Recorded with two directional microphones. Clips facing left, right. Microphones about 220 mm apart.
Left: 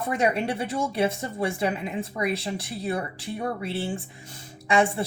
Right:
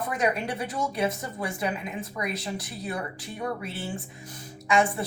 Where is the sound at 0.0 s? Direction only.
25° left (ahead or behind).